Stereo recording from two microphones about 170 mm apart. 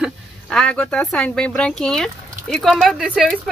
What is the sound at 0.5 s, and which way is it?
Speech, 5° left (ahead or behind).